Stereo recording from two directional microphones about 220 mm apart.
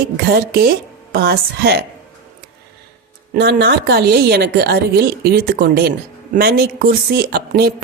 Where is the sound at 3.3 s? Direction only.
50° right (ahead or behind).